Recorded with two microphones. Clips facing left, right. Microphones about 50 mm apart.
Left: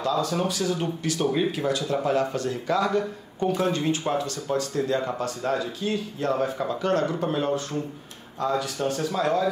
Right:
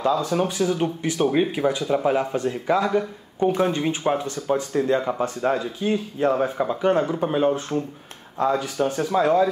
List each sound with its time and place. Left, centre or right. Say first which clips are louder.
0.0 s speech: right 3 dB; right